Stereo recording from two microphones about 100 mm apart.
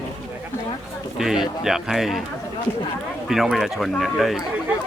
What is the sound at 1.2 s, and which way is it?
Speech, 5° right (ahead or behind).